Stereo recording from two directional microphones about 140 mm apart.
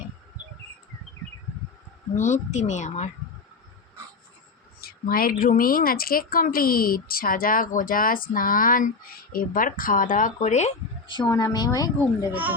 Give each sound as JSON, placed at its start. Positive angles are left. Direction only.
{"t": 2.1, "sound": "speech", "side_deg": 60}
{"t": 4.8, "sound": "a woman's voice", "side_deg": 90}
{"t": 11.1, "sound": "a woman's voice", "side_deg": 30}
{"t": 12.3, "sound": "speech", "side_deg": -10}